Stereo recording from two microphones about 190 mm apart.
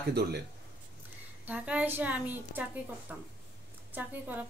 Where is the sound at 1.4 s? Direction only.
10° right (ahead or behind).